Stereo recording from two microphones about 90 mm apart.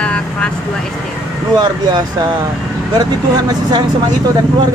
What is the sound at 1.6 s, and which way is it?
Speech, 50° right (ahead or behind).